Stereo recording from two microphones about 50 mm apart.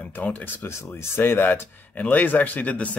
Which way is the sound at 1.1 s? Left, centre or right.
Left.